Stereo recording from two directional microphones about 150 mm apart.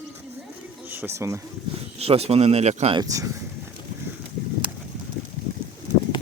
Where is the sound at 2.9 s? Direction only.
25° right (ahead or behind).